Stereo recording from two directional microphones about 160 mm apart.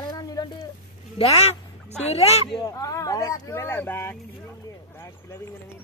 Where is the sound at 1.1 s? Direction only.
40° left (ahead or behind).